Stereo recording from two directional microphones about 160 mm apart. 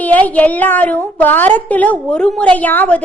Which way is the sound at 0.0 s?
10° left (ahead or behind).